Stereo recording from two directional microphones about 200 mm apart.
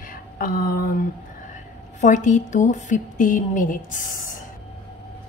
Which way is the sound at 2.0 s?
40° left (ahead or behind).